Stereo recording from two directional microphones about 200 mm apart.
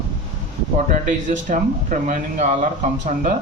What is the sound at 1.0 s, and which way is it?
Speech, 40° right (ahead or behind).